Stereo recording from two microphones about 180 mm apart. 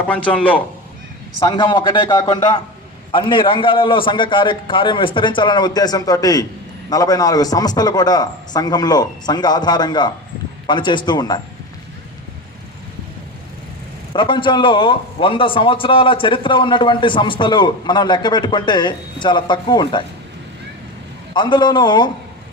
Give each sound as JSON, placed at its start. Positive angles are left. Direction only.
{"t": 0.1, "sound": "speech", "side_deg": 10}
{"t": 1.4, "sound": "a man's voice", "side_deg": 25}
{"t": 14.1, "sound": "a man's voice", "side_deg": 25}
{"t": 21.3, "sound": "a man's voice", "side_deg": 25}